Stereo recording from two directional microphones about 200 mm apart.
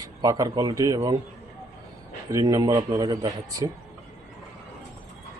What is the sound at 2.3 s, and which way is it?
A man's voice, 15° right (ahead or behind).